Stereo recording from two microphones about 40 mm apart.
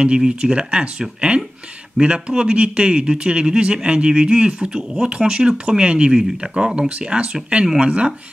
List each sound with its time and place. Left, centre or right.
0.2 s speech: right